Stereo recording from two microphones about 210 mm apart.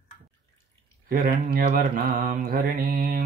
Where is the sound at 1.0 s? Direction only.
45° right (ahead or behind).